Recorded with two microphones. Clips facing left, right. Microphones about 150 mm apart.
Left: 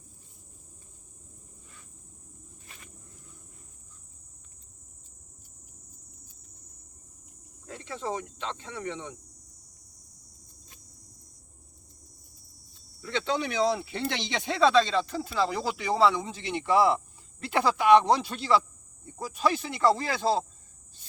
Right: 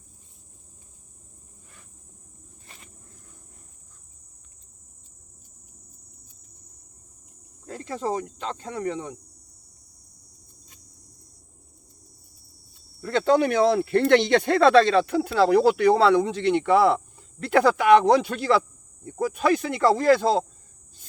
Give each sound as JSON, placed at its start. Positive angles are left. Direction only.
{"t": 7.7, "sound": "speech", "side_deg": -40}
{"t": 13.0, "sound": "speech", "side_deg": -45}